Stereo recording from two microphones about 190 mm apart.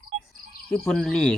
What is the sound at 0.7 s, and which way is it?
Speech, 5° left (ahead or behind).